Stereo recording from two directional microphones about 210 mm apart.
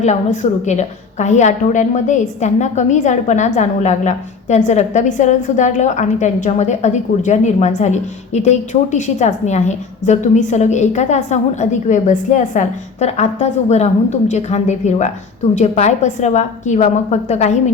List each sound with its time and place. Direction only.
0.0 s a woman's voice: 35° left (ahead or behind)